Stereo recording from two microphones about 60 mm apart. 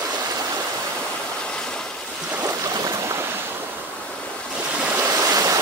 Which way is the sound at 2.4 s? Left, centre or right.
Right.